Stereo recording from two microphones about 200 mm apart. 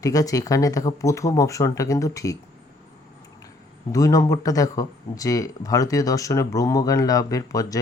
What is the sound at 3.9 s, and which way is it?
Speech, 15° left (ahead or behind).